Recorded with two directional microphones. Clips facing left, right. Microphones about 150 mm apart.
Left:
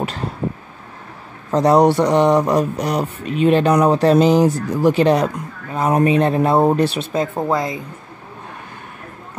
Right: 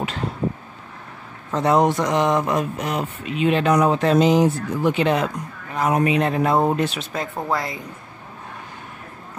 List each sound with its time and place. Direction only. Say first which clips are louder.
1.5 s speech: left 5 dB; 35° left (ahead or behind)
7.1 s speech: left 6 dB; 20° left (ahead or behind)